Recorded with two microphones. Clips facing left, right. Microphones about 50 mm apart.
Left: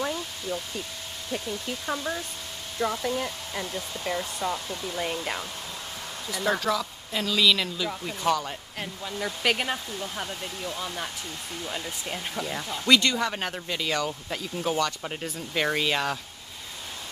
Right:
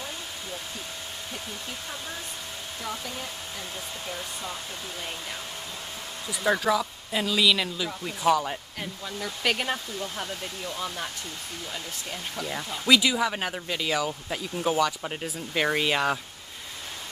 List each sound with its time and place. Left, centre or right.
2.8 s speech: left
5.0 s speech: left
6.3 s speech: centre
8.7 s speech: centre
11.6 s speech: centre
12.4 s speech: centre